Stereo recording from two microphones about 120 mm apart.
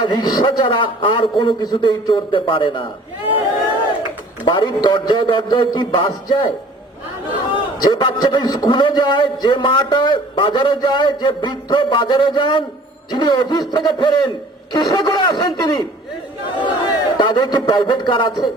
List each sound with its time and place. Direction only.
0.0 s a man's voice: 40° left (ahead or behind)
4.4 s a man's voice: 40° left (ahead or behind)
7.5 s a man's voice: 40° left (ahead or behind)